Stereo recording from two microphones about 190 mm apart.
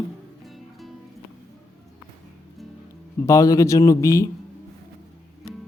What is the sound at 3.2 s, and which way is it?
A man's voice, 15° left (ahead or behind).